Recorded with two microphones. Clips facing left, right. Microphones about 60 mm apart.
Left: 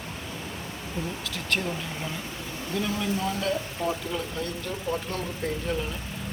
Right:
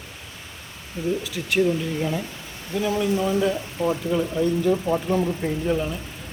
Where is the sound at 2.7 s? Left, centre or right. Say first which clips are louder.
Right 6 dB; centre.